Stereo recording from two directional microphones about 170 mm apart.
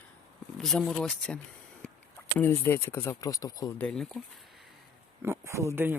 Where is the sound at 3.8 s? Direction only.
5° left (ahead or behind).